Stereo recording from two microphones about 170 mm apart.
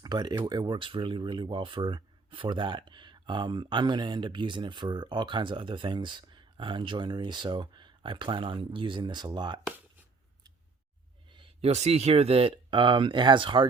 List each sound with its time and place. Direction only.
0.0 s speech: 25° right (ahead or behind)
11.3 s speech: 35° right (ahead or behind)